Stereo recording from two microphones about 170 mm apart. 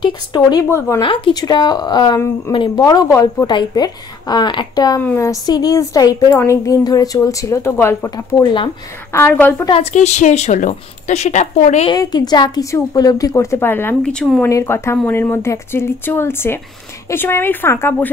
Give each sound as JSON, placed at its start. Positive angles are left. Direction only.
{"t": 0.0, "sound": "a woman's voice", "side_deg": 25}
{"t": 1.0, "sound": "a woman's voice", "side_deg": 30}
{"t": 9.7, "sound": "a woman's voice", "side_deg": 40}
{"t": 11.9, "sound": "a woman's voice", "side_deg": 25}
{"t": 14.4, "sound": "speech", "side_deg": 15}